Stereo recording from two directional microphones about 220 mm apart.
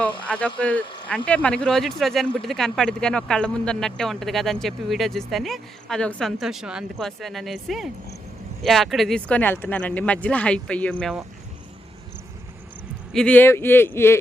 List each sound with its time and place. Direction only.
0.0 s speech: 5° left (ahead or behind)
13.1 s a man's voice: 5° left (ahead or behind)